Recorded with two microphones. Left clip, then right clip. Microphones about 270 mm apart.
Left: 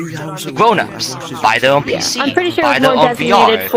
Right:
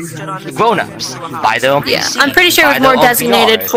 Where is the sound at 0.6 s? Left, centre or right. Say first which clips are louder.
Left 1 dB; centre.